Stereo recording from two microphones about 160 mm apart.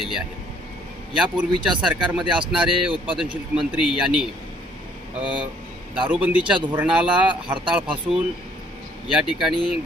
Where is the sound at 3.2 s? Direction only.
5° right (ahead or behind).